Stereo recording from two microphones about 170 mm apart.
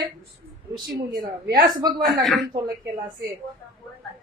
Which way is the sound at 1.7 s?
25° right (ahead or behind).